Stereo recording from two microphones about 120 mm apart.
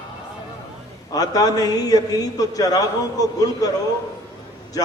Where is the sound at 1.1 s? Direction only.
30° left (ahead or behind).